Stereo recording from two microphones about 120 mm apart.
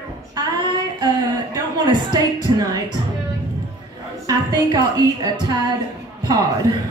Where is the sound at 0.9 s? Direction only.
35° right (ahead or behind).